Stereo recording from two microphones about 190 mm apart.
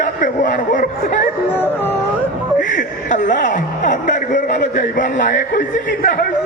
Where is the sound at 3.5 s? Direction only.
40° left (ahead or behind).